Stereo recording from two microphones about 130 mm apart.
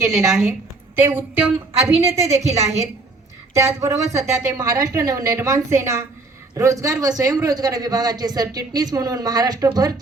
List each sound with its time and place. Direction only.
0.0 s a man's voice: 25° right (ahead or behind)